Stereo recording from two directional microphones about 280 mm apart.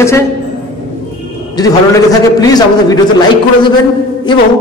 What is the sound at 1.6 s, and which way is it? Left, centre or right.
A man's voice, centre.